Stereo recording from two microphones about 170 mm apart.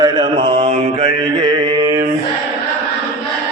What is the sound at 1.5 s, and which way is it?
Mantra, 25° right (ahead or behind).